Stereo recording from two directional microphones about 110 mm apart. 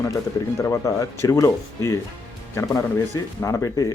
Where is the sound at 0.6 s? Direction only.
25° left (ahead or behind).